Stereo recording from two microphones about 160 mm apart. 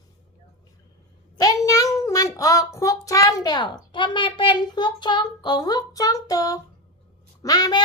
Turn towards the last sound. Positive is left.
turn(degrees=25)  # may be behind; listen again after turning